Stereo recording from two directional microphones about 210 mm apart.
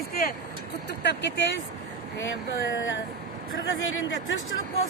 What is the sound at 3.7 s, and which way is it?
Speech, 70° left (ahead or behind).